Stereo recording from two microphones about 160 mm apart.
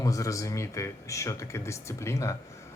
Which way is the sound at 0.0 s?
20° left (ahead or behind).